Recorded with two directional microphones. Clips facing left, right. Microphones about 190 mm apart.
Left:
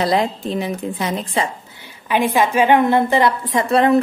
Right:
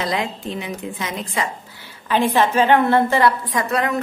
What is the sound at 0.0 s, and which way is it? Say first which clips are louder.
A woman's voice: left 5 dB; 35° left (ahead or behind).